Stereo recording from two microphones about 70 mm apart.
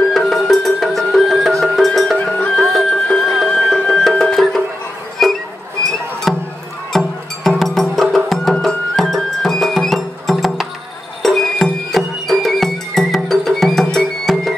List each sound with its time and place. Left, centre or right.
0.1 s music: centre
2.1 s music: centre
2.5 s music: centre
2.9 s music: centre
5.2 s a sound: centre
6.3 s music: centre